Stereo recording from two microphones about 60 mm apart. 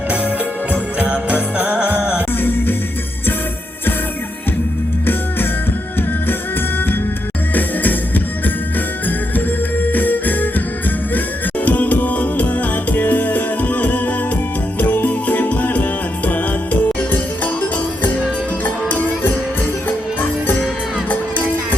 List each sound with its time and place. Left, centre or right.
0.9 s jingle bell: right
6.7 s music: left
11.6 s music: left